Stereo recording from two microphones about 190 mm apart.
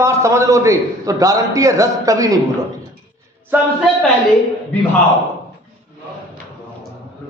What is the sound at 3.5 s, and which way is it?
Speech, 10° right (ahead or behind).